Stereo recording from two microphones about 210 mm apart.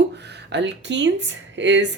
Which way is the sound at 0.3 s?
55° right (ahead or behind).